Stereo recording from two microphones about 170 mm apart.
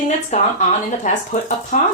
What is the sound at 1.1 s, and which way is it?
Speech, 50° left (ahead or behind).